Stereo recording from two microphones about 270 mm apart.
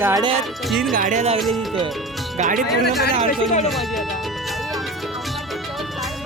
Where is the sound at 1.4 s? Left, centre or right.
Centre.